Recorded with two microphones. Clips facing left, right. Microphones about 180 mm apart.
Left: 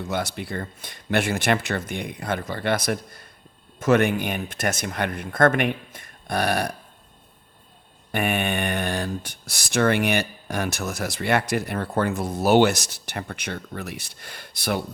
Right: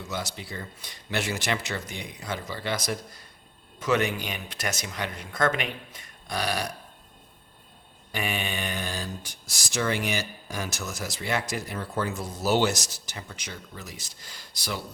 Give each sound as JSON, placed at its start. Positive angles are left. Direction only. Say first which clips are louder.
{"t": 0.1, "sound": "speech", "louder": "left 6 dB", "side_deg": 55}
{"t": 8.1, "sound": "speech", "louder": "left 7 dB", "side_deg": 55}